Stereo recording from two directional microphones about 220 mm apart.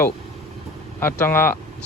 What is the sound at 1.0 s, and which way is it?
Speech, 10° left (ahead or behind).